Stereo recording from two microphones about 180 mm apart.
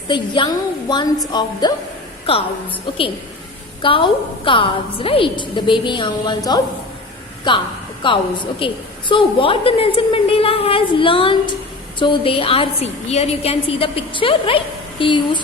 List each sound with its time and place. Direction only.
0.1 s a woman's voice: 25° left (ahead or behind)
3.8 s a woman's voice: 30° left (ahead or behind)